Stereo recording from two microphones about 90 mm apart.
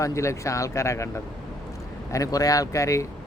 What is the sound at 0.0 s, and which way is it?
Speech, 35° left (ahead or behind).